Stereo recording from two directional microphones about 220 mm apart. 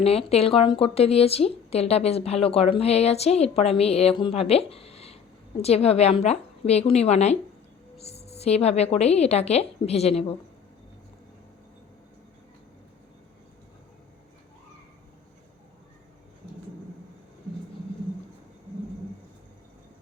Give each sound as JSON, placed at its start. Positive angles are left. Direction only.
{"t": 0.0, "sound": "speech", "side_deg": 25}